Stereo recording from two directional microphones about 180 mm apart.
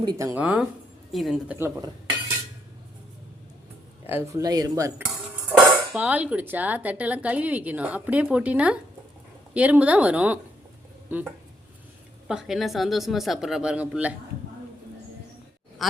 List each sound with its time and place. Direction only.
0.0 s dishes: 20° right (ahead or behind)
1.1 s speech: centre (ahead or behind)
1.5 s dishes: 15° right (ahead or behind)
4.0 s dishes: 15° right (ahead or behind)
5.5 s dishes: 10° right (ahead or behind)
12.3 s speech: centre (ahead or behind)